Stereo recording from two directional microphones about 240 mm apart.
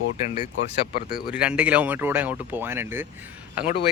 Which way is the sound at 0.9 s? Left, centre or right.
Left.